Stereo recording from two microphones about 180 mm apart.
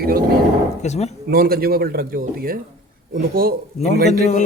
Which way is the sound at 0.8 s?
40° left (ahead or behind).